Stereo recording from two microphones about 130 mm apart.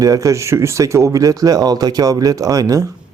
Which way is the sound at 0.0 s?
25° right (ahead or behind).